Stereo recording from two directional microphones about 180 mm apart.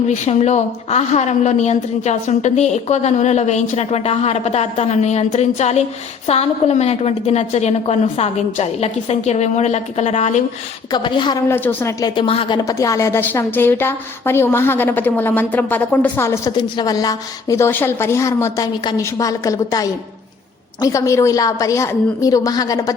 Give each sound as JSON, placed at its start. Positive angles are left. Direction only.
{"t": 0.1, "sound": "a woman's voice", "side_deg": 40}
{"t": 10.9, "sound": "a woman's voice", "side_deg": 25}
{"t": 11.4, "sound": "a woman's voice", "side_deg": 15}
{"t": 12.6, "sound": "a woman's voice", "side_deg": 20}